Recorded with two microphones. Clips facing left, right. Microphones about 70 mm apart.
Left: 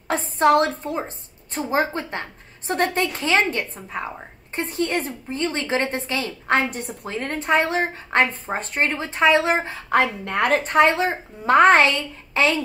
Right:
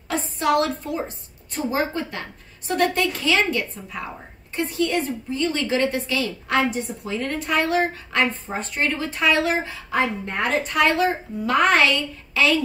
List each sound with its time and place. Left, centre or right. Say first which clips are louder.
0.1 s a woman's voice: left 4 dB; left
8.5 s a woman's voice: left 2 dB; left
8.9 s speech: left 4 dB; left
9.8 s a woman's voice: left 4 dB; left
10.6 s a woman's voice: right 1 dB; left